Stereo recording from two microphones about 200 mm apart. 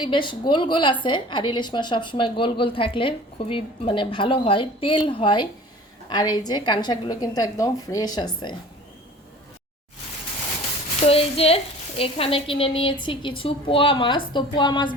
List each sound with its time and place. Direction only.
0.0 s a woman's voice: 25° left (ahead or behind)
11.0 s a woman's voice: 30° left (ahead or behind)